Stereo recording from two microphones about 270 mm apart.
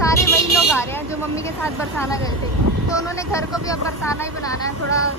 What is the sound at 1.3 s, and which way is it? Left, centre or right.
Speech, centre.